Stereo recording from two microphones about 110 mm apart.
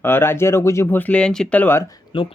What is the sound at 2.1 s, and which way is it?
Speech, 50° left (ahead or behind).